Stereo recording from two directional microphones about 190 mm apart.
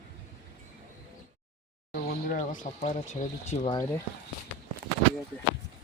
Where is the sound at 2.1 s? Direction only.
45° left (ahead or behind).